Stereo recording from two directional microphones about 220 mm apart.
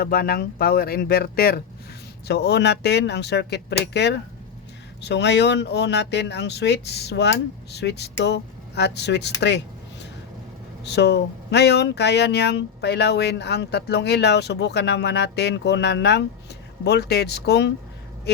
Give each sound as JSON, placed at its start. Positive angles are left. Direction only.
{"t": 0.0, "sound": "speech", "side_deg": 45}
{"t": 9.4, "sound": "a sound", "side_deg": 50}
{"t": 10.8, "sound": "speech", "side_deg": 50}